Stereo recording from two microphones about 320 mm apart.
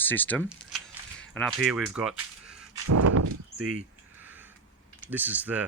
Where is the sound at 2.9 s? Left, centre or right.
Right.